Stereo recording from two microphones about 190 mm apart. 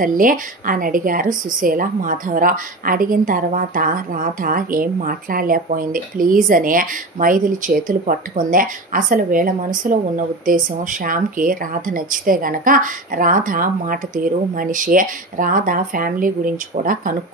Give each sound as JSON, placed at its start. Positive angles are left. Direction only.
{"t": 0.0, "sound": "a woman's voice", "side_deg": -45}